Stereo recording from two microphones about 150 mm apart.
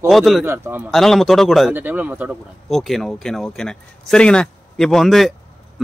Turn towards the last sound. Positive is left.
turn(degrees=0)  # may be behind; listen again after turning